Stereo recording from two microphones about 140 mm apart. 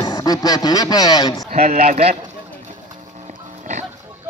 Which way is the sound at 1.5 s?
55° right (ahead or behind).